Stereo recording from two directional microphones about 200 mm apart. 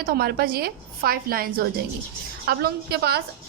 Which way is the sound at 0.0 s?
50° right (ahead or behind).